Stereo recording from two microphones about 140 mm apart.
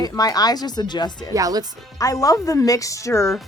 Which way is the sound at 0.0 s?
30° left (ahead or behind).